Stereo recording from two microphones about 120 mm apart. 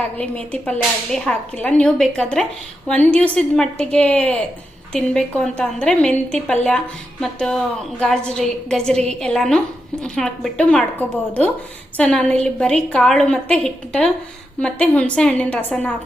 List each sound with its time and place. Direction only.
0.2 s a woman's voice: 10° left (ahead or behind)